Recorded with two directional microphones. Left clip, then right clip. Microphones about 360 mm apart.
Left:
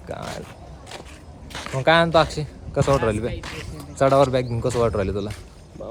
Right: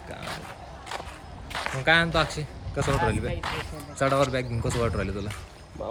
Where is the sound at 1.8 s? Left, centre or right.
Centre.